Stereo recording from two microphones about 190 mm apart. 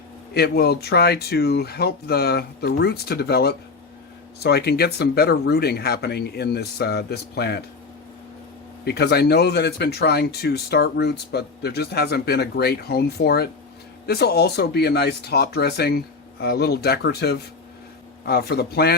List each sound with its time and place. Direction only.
0.3 s speech: 55° left (ahead or behind)
8.8 s speech: 60° left (ahead or behind)